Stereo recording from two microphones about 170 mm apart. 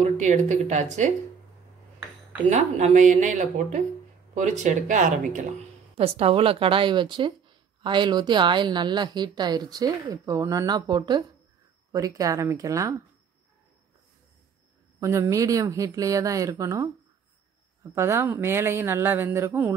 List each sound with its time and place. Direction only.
0.0 s speech: 45° right (ahead or behind)
2.5 s speech: 45° right (ahead or behind)
5.9 s speech: 35° right (ahead or behind); by 12.9 s 20° right (ahead or behind)
15.0 s speech: 15° right (ahead or behind)
17.9 s speech: 15° right (ahead or behind)